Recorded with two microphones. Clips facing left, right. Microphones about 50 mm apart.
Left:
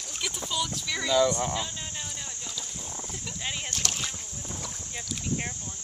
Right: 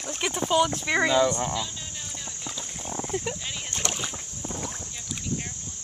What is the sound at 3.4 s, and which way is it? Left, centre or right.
Rowboat, centre.